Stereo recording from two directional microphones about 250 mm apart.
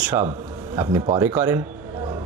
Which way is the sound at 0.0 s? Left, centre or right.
Centre.